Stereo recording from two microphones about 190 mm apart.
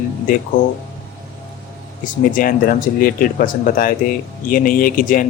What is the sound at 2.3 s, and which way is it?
A man's voice, 45° left (ahead or behind).